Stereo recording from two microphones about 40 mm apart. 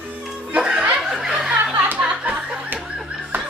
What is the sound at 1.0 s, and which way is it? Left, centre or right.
Chuckle, centre.